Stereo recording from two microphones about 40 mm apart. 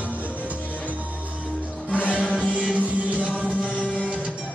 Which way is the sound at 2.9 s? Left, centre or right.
Right.